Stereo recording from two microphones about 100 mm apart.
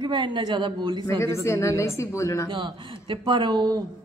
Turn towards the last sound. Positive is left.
turn(degrees=-45)  # may be behind; listen again after turning